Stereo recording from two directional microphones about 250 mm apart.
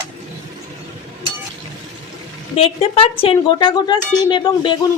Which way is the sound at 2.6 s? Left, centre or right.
Left.